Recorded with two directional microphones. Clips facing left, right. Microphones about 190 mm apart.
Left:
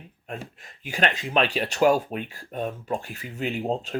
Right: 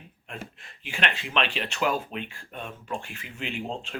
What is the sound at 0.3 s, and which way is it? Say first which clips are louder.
Speech: left 4 dB; 40° left (ahead or behind).